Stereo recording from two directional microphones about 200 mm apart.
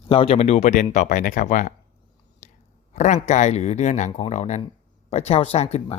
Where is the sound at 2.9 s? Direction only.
35° left (ahead or behind).